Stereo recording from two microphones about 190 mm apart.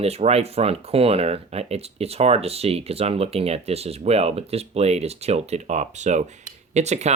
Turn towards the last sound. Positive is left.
turn(degrees=-35)  # may be behind; listen again after turning